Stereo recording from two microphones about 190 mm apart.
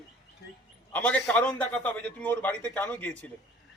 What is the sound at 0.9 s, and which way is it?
A man's voice, 5° left (ahead or behind).